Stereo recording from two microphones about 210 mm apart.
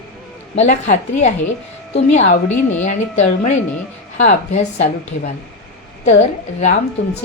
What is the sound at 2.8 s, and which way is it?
A woman's voice, 35° left (ahead or behind).